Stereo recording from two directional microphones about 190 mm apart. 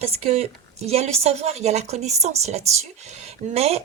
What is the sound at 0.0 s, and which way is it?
A woman's voice, 30° right (ahead or behind).